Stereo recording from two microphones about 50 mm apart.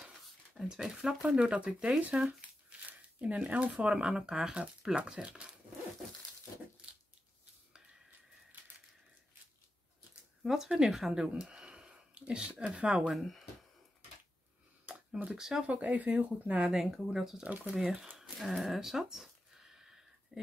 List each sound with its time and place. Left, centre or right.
0.6 s speech: centre
2.1 s speech: right
3.9 s speech: centre
10.4 s speech: centre
13.1 s speech: centre
14.9 s a sound: right
15.3 s speech: centre
15.6 s speech: right
16.7 s speech: centre
18.1 s a sound: centre